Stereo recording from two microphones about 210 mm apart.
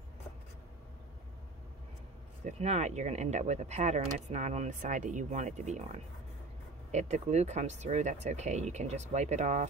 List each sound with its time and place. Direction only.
2.4 s speech: 30° right (ahead or behind)